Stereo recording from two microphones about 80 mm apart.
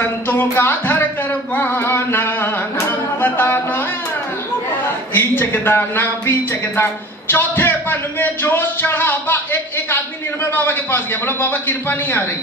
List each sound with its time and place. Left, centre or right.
0.0 s music: left
1.6 s singing: left
5.1 s a man's voice: left
6.8 s a sound: left
10.5 s a man's voice: left